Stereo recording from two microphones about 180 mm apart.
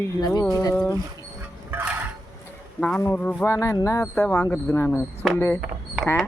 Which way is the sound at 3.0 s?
10° left (ahead or behind).